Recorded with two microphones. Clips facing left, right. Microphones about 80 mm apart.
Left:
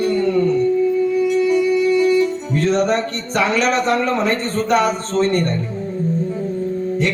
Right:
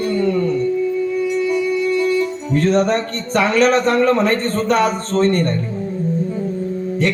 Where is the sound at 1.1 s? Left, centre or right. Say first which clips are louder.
Left 2 dB; centre.